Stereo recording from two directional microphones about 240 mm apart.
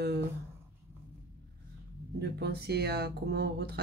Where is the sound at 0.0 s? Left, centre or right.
Right.